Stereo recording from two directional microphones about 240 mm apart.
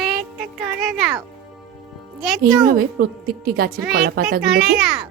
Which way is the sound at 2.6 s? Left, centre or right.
Right.